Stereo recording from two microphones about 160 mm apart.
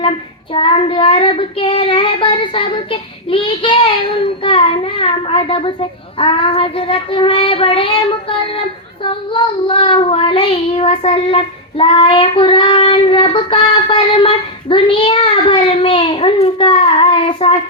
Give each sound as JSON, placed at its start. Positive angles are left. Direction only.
{"t": 0.5, "sound": "child singing", "side_deg": 35}